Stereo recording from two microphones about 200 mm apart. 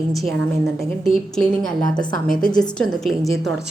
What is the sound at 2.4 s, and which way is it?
Speech, 5° left (ahead or behind).